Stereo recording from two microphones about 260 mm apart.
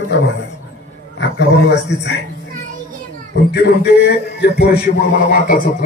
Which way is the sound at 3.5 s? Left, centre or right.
Left.